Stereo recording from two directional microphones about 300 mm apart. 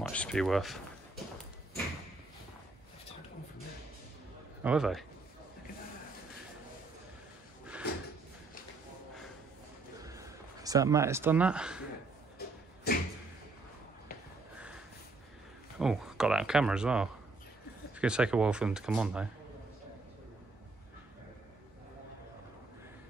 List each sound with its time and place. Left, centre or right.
0.0 s speech: centre
4.6 s speech: centre
10.0 s speech: centre
12.4 s a sound: left
15.8 s speech: centre